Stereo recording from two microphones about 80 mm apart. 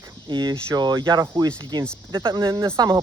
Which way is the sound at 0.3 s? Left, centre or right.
Right.